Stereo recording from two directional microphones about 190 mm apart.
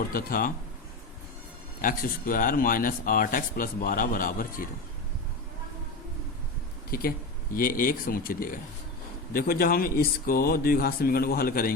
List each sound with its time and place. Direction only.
0.1 s speech: 50° left (ahead or behind)
1.8 s speech: 45° left (ahead or behind)
6.9 s speech: 50° left (ahead or behind)